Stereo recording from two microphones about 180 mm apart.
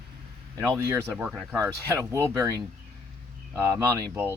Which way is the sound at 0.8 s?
15° right (ahead or behind).